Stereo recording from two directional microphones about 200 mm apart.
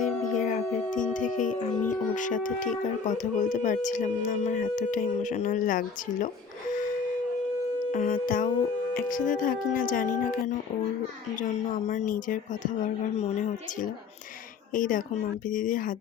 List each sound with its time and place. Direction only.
0.0 s music: 40° left (ahead or behind)
2.1 s speech: 40° left (ahead or behind)
7.9 s music: 45° left (ahead or behind)
8.9 s speech: 45° left (ahead or behind)